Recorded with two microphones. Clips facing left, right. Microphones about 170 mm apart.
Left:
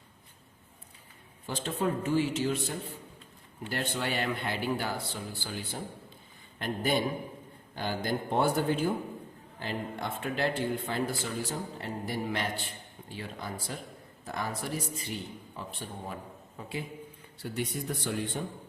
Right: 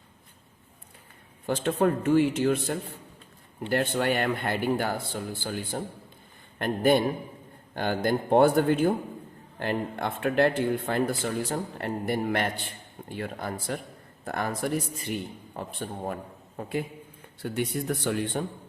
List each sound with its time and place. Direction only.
1.5 s speech: 60° right (ahead or behind)